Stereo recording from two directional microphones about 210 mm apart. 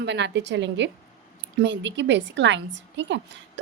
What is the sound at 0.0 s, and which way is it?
A woman's voice, 55° right (ahead or behind).